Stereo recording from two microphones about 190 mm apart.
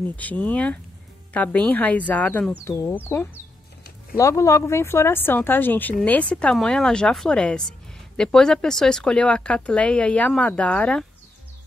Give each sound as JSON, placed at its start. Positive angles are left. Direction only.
{"t": 0.1, "sound": "speech", "side_deg": 10}
{"t": 4.2, "sound": "speech", "side_deg": 15}